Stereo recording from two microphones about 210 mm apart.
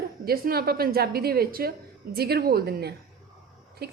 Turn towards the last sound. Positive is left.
turn(degrees=-50)  # may be behind; listen again after turning